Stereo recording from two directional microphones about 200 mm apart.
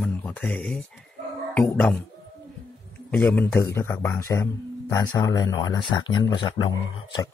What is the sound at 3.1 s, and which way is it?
Speech, 10° left (ahead or behind).